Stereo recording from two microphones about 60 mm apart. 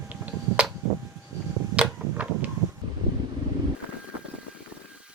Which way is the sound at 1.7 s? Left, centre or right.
Right.